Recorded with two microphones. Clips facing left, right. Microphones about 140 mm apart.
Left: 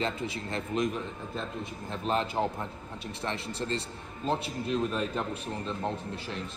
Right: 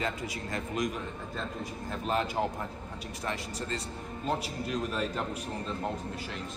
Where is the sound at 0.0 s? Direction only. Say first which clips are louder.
Left 2 dB; 25° left (ahead or behind).